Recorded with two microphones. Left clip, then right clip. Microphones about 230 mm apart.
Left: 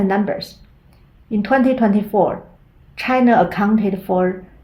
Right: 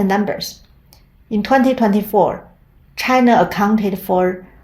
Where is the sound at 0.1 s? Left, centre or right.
Right.